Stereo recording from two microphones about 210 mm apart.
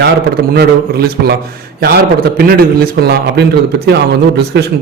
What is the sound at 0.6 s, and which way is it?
Speech, 50° right (ahead or behind).